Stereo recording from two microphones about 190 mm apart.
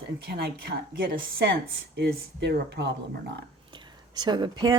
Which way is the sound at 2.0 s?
65° right (ahead or behind).